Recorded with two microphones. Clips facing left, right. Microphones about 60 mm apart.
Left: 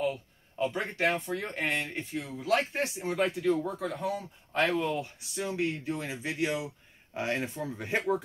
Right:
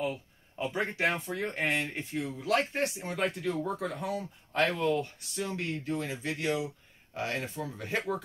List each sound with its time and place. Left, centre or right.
0.0 s speech: centre